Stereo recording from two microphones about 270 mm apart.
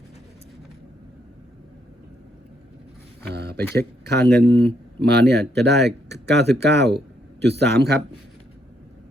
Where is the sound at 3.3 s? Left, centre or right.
Right.